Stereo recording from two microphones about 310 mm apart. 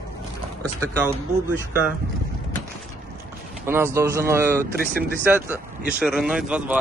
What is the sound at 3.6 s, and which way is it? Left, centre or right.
Speech, centre.